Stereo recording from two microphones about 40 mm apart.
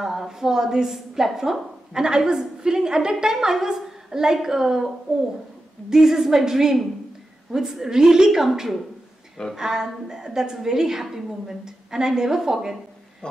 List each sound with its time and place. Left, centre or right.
0.0 s a woman's voice: centre
9.6 s a woman's voice: centre
11.1 s a woman's voice: centre
11.6 s a woman's voice: centre
13.2 s a sound: left